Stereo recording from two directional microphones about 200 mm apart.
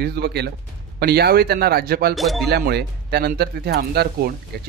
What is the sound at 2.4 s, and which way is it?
Speech, 55° right (ahead or behind).